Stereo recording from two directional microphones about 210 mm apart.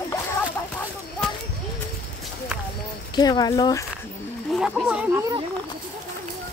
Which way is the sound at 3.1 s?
20° left (ahead or behind).